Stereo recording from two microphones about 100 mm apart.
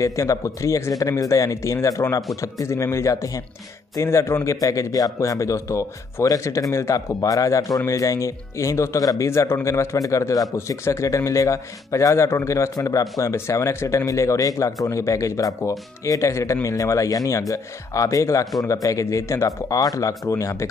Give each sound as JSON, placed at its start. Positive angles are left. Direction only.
{"t": 0.0, "sound": "speech", "side_deg": 30}